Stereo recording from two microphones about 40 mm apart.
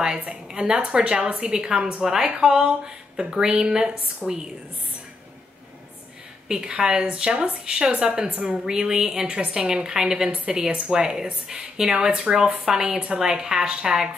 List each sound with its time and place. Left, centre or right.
0.3 s a woman's voice: centre
6.5 s a woman's voice: centre
8.6 s a woman's voice: centre